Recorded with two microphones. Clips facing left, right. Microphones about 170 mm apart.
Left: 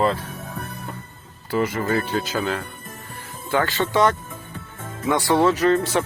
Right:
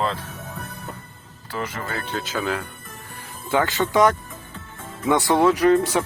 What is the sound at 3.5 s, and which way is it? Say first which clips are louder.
Speech: right 1 dB; 20° right (ahead or behind).